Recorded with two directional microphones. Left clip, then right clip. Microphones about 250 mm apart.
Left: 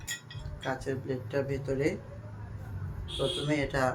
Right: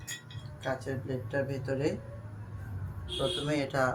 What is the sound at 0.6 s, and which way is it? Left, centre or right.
Speech, centre.